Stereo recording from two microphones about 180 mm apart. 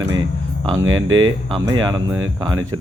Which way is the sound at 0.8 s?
90° right.